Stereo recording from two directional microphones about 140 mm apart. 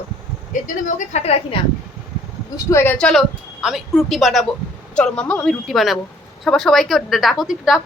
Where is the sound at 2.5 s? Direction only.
20° left (ahead or behind).